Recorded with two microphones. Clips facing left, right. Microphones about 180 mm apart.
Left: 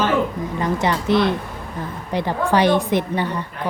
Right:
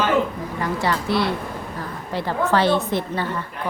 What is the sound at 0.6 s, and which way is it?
A woman's voice, 20° left (ahead or behind).